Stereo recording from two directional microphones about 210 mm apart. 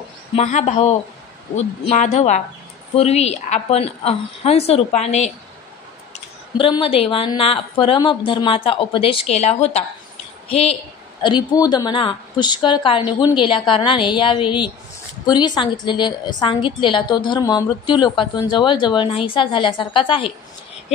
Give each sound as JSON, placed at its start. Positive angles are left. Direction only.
{"t": 0.4, "sound": "a woman's voice", "side_deg": 35}
{"t": 6.6, "sound": "a woman's voice", "side_deg": 25}